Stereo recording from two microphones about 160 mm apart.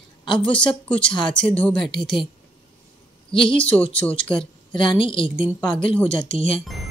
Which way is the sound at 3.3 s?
30° left (ahead or behind).